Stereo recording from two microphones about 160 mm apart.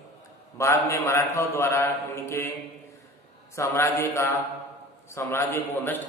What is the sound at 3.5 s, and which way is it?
A man's voice, 20° left (ahead or behind).